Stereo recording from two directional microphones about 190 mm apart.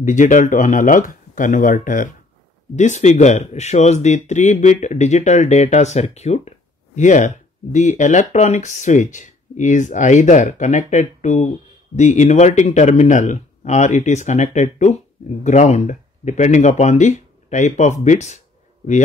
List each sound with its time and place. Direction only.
0.0 s speech: 40° left (ahead or behind)